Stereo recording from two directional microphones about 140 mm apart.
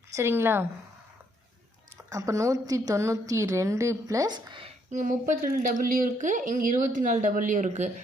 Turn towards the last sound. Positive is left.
turn(degrees=-60)  # may be behind; listen again after turning